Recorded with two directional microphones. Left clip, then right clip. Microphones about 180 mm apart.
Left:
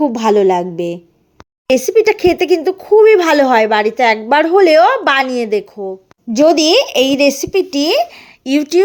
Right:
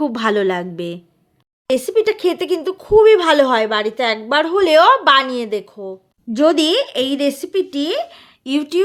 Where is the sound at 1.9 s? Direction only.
15° left (ahead or behind).